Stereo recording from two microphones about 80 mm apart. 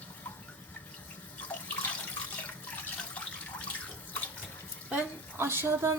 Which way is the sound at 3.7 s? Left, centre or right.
Left.